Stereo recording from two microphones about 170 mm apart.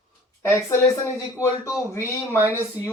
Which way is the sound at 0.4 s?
15° left (ahead or behind).